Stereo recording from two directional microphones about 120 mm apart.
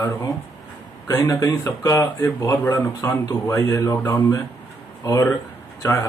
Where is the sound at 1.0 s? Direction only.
30° left (ahead or behind).